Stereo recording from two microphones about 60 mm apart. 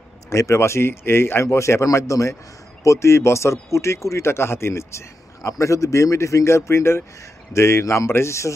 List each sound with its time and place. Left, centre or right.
0.3 s speech: left
5.5 s speech: left